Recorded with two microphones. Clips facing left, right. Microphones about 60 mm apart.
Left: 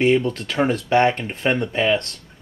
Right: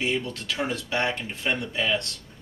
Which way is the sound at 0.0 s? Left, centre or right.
Left.